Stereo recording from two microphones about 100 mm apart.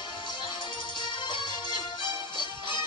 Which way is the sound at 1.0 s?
55° left (ahead or behind).